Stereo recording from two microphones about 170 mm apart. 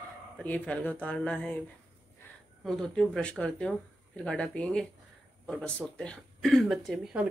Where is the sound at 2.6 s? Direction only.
5° left (ahead or behind).